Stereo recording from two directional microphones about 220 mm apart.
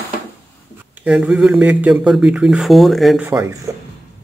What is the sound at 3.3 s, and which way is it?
Speech, 10° right (ahead or behind).